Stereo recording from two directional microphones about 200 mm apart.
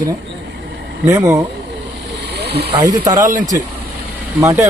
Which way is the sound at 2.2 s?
55° right (ahead or behind).